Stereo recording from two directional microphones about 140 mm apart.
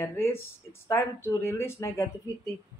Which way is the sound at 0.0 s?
20° left (ahead or behind).